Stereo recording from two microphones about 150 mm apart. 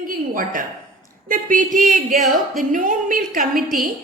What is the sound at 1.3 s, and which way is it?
A woman's voice, 60° right (ahead or behind).